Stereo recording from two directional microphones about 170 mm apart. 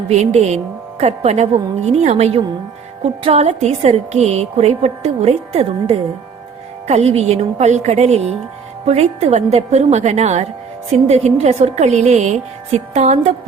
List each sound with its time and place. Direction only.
0.1 s speech: 40° right (ahead or behind)